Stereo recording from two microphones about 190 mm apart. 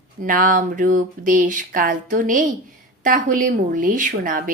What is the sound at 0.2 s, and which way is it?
Speech, 45° right (ahead or behind).